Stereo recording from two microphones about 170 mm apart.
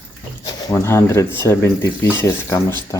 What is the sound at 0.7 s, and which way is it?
Speech, 15° left (ahead or behind).